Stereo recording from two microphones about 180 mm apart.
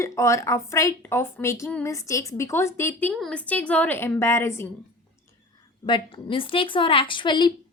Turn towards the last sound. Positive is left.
turn(degrees=25)  # may be behind; listen again after turning